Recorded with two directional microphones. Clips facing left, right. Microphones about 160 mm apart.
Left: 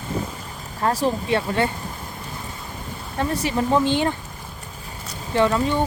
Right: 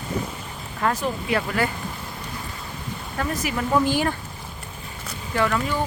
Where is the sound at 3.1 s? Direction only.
30° left (ahead or behind).